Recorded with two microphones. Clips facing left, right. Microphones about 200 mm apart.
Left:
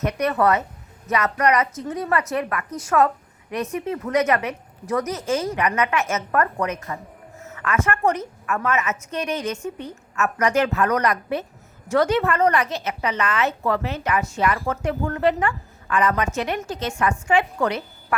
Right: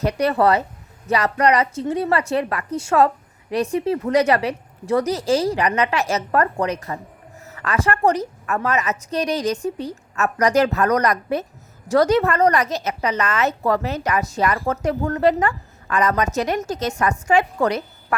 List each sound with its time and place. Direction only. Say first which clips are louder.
0.0 s a woman's voice: right 3 dB; 30° right (ahead or behind)